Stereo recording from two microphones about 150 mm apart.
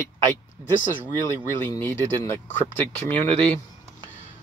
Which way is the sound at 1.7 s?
20° left (ahead or behind).